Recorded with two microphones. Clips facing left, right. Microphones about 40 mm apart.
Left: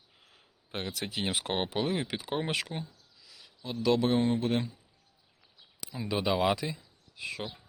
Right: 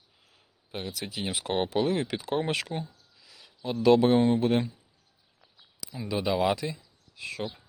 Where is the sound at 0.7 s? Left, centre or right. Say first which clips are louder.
Even; left.